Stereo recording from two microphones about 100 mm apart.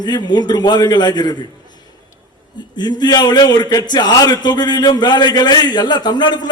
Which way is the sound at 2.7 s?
45° left (ahead or behind).